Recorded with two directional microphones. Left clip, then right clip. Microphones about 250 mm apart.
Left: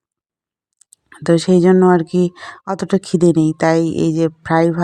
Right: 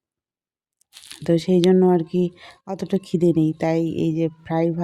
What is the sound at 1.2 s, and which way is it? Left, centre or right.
Speech, centre.